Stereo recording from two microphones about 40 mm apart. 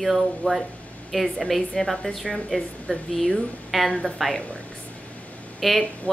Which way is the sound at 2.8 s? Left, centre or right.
Centre.